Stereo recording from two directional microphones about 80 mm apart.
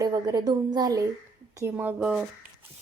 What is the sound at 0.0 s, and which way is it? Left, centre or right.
A woman's voice, right.